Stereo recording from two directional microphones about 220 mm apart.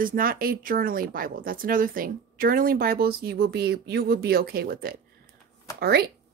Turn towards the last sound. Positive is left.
turn(degrees=-45)  # may be behind; listen again after turning